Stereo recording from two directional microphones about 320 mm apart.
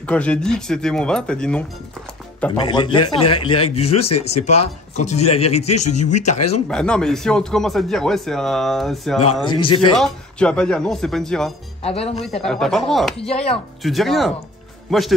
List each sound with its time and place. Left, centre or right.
0.0 s speech: centre
2.6 s a man's voice: centre
6.7 s speech: centre
9.4 s a man's voice: centre
9.9 s speech: centre
11.8 s speech: centre
12.4 s speech: centre
13.3 s speech: centre
13.8 s speech: centre